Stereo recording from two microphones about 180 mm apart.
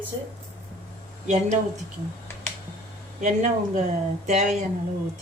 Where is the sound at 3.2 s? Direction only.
45° right (ahead or behind).